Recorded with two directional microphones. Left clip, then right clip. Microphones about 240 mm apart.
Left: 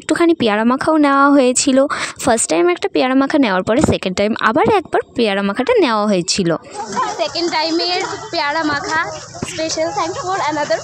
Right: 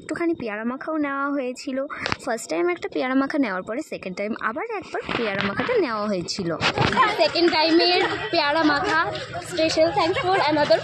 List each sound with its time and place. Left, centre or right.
0.1 s speech: left
1.5 s speech: left
2.2 s speech: left
7.2 s speech: centre